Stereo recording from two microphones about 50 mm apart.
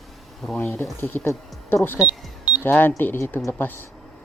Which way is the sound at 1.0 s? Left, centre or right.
Left.